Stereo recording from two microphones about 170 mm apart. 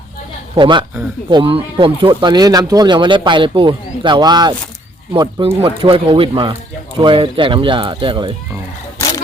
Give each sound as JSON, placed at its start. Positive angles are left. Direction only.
{"t": 0.5, "sound": "speech", "side_deg": -30}